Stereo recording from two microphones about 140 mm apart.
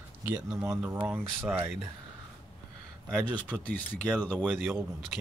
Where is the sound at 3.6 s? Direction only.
10° left (ahead or behind).